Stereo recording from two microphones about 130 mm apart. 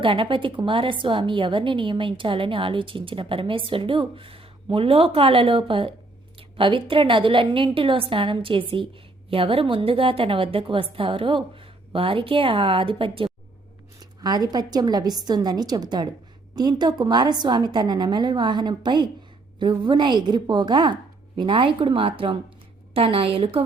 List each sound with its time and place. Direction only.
0.0 s a woman's voice: 40° right (ahead or behind)
14.0 s a woman's voice: 30° right (ahead or behind)